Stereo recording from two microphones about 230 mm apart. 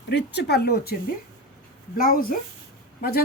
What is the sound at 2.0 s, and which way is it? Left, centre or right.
Speech, left.